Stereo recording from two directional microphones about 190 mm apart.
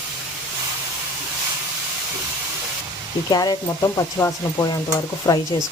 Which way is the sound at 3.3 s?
20° left (ahead or behind).